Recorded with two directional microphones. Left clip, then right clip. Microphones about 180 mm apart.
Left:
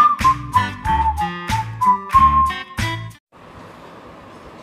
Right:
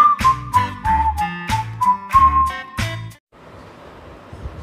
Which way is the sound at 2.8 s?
Centre (ahead or behind).